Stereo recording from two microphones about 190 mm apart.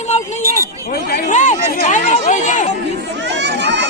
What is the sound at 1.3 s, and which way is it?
Speech, 40° left (ahead or behind).